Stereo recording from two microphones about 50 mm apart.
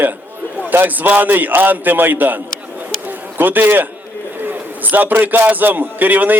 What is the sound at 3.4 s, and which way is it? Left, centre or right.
A man's voice, right.